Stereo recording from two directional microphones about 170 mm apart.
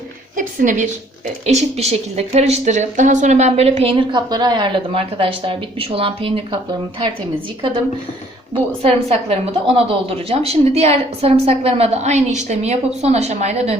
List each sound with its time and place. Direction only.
0.3 s a woman's voice: 50° right (ahead or behind); by 6.6 s 30° right (ahead or behind)
8.8 s a woman's voice: 35° right (ahead or behind)